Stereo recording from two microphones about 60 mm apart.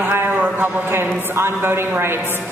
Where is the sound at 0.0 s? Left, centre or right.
Right.